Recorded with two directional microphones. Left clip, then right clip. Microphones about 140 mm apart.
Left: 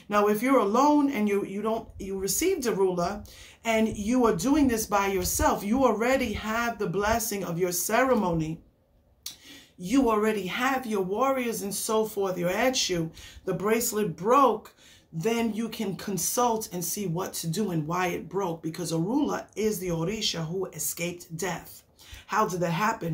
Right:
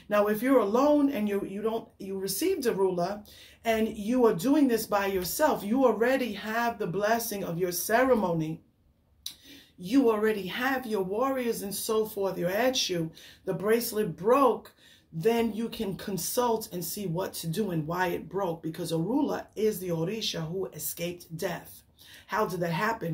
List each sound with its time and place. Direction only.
0.1 s speech: 5° left (ahead or behind)
9.8 s speech: 10° left (ahead or behind)
11.4 s speech: 40° left (ahead or behind)
11.8 s speech: 10° left (ahead or behind)